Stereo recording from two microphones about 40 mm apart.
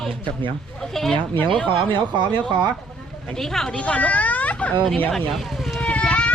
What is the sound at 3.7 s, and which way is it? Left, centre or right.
Speech, left.